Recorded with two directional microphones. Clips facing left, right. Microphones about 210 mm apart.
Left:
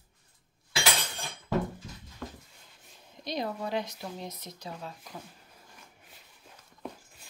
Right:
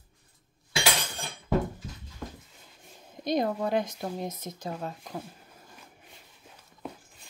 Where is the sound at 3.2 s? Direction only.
50° right (ahead or behind).